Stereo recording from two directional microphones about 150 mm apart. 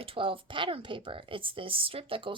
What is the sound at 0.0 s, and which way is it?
Speech, 35° right (ahead or behind).